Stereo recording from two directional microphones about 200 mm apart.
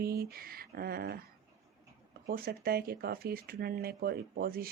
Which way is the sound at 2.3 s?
50° right (ahead or behind).